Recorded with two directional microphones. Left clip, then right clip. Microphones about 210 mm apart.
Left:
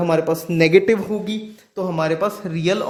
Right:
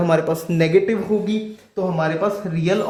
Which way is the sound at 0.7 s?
45° left (ahead or behind).